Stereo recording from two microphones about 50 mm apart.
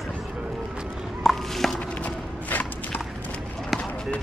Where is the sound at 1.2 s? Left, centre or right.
Centre.